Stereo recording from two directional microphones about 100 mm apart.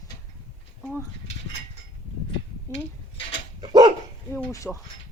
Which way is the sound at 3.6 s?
45° right (ahead or behind).